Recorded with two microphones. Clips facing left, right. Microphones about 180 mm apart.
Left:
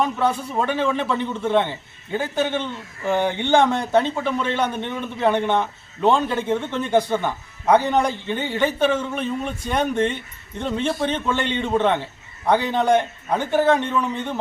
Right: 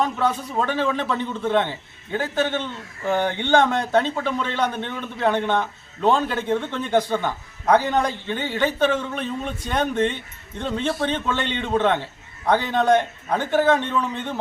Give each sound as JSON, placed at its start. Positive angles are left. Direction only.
{"t": 0.0, "sound": "speech", "side_deg": 15}
{"t": 11.0, "sound": "speech", "side_deg": 15}